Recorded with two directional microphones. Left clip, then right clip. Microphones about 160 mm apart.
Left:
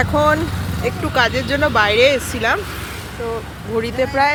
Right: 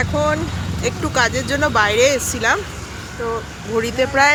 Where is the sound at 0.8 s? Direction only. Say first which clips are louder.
Left 1 dB; centre (ahead or behind).